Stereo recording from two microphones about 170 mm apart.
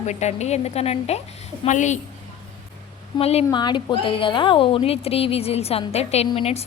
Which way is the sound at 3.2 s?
35° left (ahead or behind).